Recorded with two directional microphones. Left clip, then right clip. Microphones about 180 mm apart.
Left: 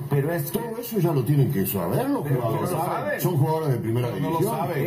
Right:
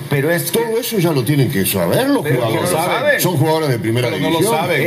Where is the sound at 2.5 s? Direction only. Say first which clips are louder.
Right 9 dB; 25° right (ahead or behind).